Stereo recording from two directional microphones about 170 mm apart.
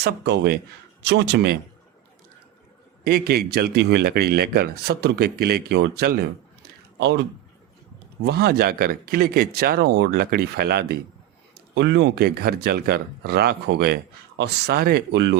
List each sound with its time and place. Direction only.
0.0 s a man's voice: 80° right
3.0 s speech: 65° right (ahead or behind)
6.6 s a sound: 85° right
8.2 s speech: 70° right (ahead or behind)
11.7 s speech: 90° right